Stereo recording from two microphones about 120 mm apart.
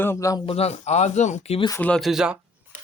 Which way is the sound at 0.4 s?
55° left (ahead or behind).